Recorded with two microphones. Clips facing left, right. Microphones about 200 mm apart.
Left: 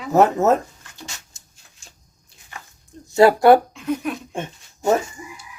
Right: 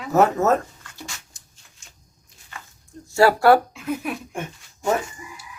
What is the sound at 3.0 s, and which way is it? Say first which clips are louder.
Speech: left 3 dB; 20° left (ahead or behind).